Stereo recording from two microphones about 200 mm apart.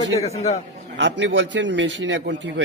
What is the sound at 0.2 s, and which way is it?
Speech, 30° left (ahead or behind).